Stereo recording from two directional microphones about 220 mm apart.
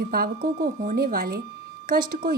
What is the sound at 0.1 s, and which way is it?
A woman's voice, 40° right (ahead or behind).